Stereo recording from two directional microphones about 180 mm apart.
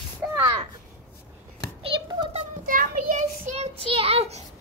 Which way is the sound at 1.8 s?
30° right (ahead or behind).